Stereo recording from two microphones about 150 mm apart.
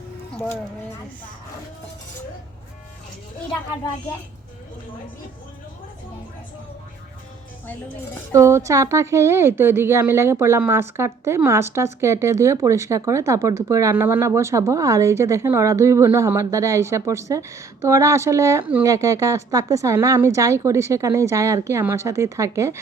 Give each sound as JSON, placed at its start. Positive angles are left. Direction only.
{"t": 8.3, "sound": "a woman's voice", "side_deg": -20}